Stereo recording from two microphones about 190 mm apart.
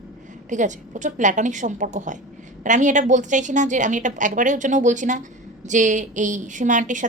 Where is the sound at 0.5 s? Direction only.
40° right (ahead or behind).